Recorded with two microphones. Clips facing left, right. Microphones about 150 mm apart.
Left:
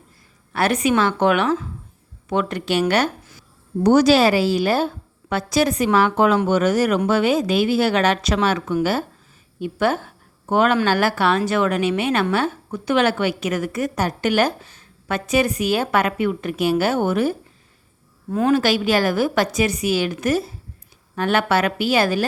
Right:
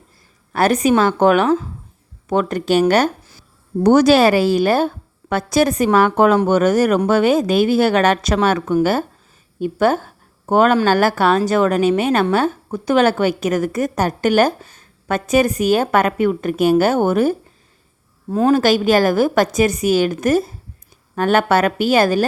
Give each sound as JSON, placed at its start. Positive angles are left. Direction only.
{"t": 0.5, "sound": "a woman's voice", "side_deg": -40}
{"t": 3.8, "sound": "a woman's voice", "side_deg": -55}
{"t": 18.3, "sound": "a woman's voice", "side_deg": -35}